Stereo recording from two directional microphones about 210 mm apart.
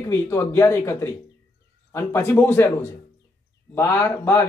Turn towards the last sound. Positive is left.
turn(degrees=10)  # may be behind; listen again after turning